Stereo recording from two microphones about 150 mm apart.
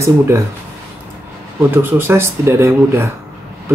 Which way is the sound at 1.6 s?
15° right (ahead or behind).